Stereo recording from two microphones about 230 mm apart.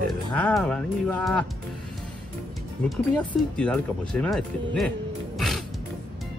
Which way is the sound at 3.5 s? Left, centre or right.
Centre.